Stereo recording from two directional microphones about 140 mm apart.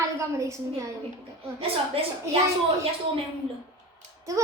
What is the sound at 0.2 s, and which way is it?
Speech, 20° right (ahead or behind).